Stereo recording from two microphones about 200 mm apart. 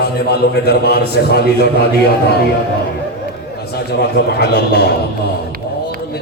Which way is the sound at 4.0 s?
55° left (ahead or behind).